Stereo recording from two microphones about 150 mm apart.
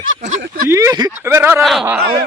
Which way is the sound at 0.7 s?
20° right (ahead or behind).